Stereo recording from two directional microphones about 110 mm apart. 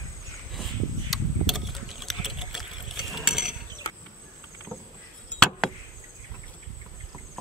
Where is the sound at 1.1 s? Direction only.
Centre (ahead or behind).